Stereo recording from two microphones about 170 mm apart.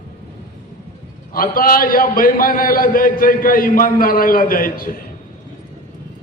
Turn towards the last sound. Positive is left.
turn(degrees=55)  # may be behind; listen again after turning